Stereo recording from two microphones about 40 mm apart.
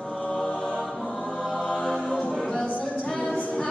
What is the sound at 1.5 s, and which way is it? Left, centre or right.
Music, left.